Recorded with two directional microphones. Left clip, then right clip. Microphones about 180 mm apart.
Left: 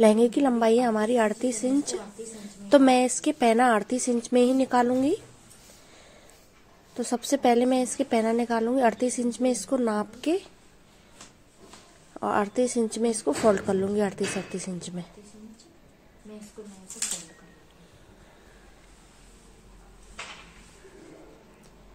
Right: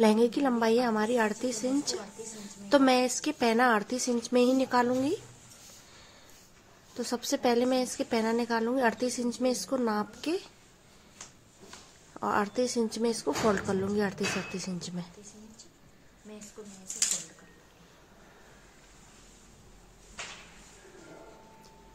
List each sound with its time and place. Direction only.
0.0 s speech: 15° left (ahead or behind)
7.0 s speech: 10° left (ahead or behind)
12.1 s speech: 10° left (ahead or behind)
16.6 s speech: 20° right (ahead or behind)